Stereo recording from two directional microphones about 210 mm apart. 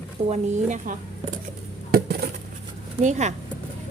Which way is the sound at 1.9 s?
45° right (ahead or behind).